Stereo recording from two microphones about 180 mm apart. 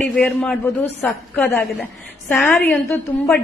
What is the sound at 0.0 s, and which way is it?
A woman's voice, 5° left (ahead or behind).